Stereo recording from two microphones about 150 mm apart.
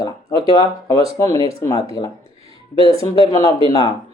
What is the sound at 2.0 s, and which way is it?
Speech, 40° left (ahead or behind).